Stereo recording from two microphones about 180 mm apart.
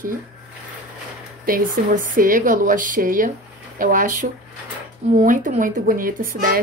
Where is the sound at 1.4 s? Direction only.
50° right (ahead or behind).